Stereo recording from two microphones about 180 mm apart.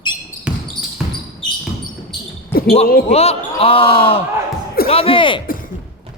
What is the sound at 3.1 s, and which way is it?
Speech, 35° left (ahead or behind).